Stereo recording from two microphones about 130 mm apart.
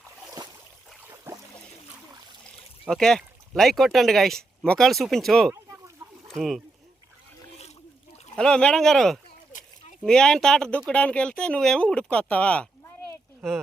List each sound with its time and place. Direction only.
1.0 s a sound: 25° right (ahead or behind)
2.9 s speech: 5° left (ahead or behind)
8.4 s speech: 5° left (ahead or behind)